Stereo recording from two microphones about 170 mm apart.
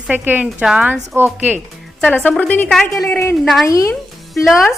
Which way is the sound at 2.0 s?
10° left (ahead or behind).